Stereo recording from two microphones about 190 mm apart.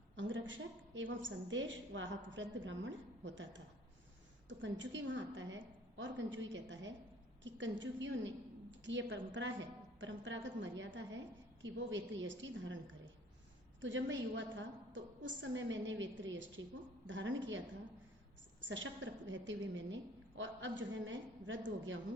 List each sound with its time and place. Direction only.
0.2 s a woman's voice: 75° right (ahead or behind)
13.8 s a woman's voice: 75° right (ahead or behind)
18.6 s a woman's voice: 75° right (ahead or behind)